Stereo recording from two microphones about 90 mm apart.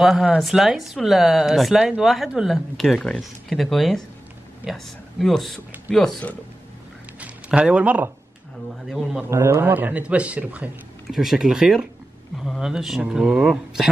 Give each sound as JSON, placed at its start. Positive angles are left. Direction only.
{"t": 0.0, "sound": "speech", "side_deg": 0}
{"t": 7.2, "sound": "a sound", "side_deg": -10}
{"t": 8.8, "sound": "speech", "side_deg": -5}
{"t": 9.3, "sound": "speech", "side_deg": -30}
{"t": 11.1, "sound": "speech", "side_deg": -5}